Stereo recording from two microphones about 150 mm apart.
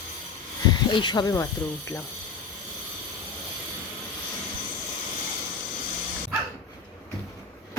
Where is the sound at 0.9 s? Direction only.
30° left (ahead or behind).